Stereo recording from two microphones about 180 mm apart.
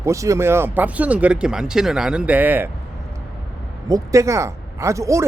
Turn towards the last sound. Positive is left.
turn(degrees=-15)  # may be behind; listen again after turning